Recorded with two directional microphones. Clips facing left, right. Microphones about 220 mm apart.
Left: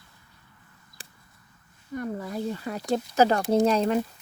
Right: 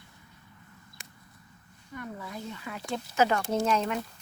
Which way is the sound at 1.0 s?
30° left (ahead or behind).